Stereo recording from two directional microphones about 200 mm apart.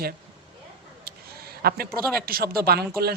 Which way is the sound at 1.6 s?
50° right (ahead or behind).